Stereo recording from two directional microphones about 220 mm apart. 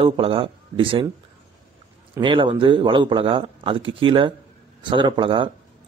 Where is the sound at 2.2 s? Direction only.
20° right (ahead or behind).